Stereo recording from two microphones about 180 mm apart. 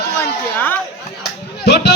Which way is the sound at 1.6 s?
65° left (ahead or behind).